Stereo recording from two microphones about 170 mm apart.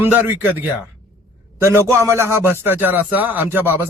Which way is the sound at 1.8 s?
15° right (ahead or behind).